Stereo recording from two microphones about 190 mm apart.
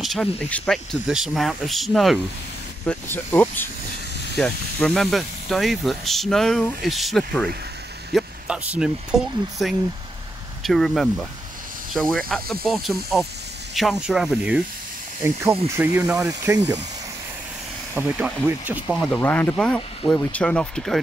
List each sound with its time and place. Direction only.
0.0 s speech: 5° left (ahead or behind)
2.8 s speech: 10° left (ahead or behind); by 16.2 s 5° right (ahead or behind)
16.2 s speech: 20° right (ahead or behind)
17.9 s speech: 10° right (ahead or behind)
19.1 s speech: 10° left (ahead or behind)